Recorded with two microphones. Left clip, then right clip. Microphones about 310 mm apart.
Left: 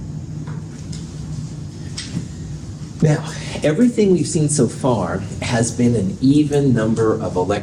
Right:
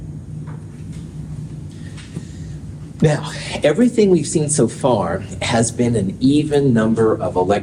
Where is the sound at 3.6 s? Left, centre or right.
Right.